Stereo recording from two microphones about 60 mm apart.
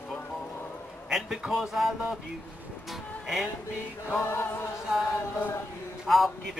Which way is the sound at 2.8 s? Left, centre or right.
Centre.